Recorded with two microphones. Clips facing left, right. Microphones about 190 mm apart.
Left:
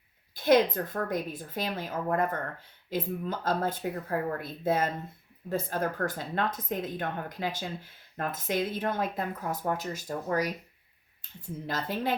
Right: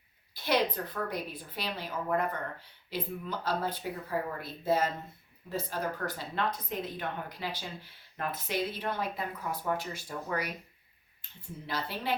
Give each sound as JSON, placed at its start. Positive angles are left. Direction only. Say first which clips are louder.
{"t": 0.3, "sound": "speech", "louder": "left 6 dB", "side_deg": 50}